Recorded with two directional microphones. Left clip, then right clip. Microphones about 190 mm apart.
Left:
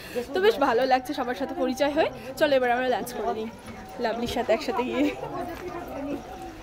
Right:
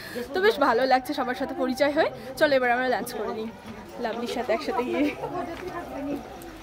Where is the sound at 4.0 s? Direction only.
25° left (ahead or behind).